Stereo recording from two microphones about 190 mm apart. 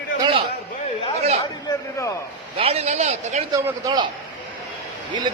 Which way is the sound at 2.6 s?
35° right (ahead or behind).